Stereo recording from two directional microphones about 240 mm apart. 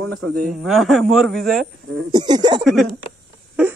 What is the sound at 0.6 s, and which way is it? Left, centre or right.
Speech, centre.